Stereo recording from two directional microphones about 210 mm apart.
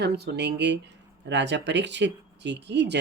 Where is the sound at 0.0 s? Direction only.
50° right (ahead or behind).